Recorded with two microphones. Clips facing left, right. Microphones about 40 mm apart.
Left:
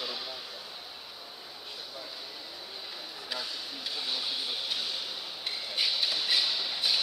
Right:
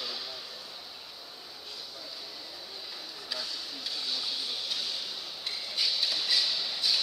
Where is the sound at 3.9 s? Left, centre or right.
Centre.